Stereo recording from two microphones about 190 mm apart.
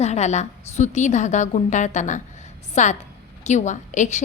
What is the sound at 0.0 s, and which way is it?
A woman's voice, 35° left (ahead or behind).